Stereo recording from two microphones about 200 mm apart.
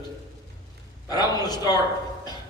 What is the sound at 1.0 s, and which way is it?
Speech, 20° left (ahead or behind).